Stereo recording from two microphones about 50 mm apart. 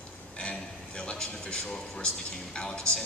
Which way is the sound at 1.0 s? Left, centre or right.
Centre.